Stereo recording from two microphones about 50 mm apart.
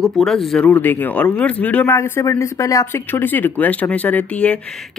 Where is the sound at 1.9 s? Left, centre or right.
Left.